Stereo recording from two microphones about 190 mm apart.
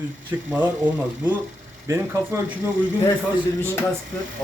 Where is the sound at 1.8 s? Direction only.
15° right (ahead or behind).